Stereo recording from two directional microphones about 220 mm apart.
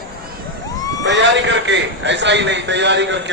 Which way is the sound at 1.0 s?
55° right (ahead or behind).